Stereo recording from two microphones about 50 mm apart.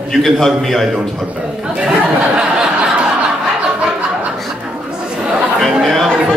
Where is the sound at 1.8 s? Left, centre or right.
Right.